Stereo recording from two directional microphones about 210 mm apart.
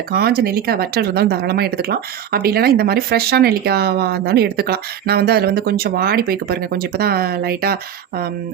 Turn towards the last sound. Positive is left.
turn(degrees=-45)  # may be behind; listen again after turning